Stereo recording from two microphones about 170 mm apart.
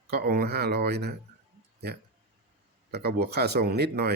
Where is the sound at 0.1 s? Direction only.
70° right (ahead or behind).